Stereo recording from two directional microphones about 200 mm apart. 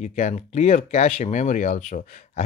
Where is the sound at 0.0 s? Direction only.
35° left (ahead or behind).